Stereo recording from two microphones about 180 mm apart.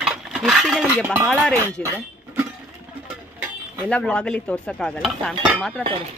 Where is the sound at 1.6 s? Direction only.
15° right (ahead or behind).